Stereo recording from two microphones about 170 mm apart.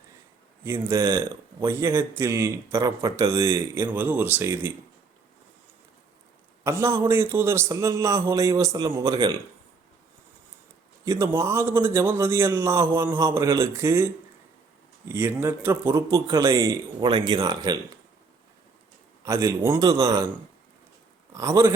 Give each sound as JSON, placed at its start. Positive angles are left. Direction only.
{"t": 0.6, "sound": "a man's voice", "side_deg": -15}
{"t": 6.7, "sound": "a man's voice", "side_deg": -15}
{"t": 11.0, "sound": "a man's voice", "side_deg": -20}
{"t": 15.1, "sound": "a man's voice", "side_deg": -15}
{"t": 19.2, "sound": "a man's voice", "side_deg": -15}
{"t": 21.3, "sound": "a man's voice", "side_deg": -15}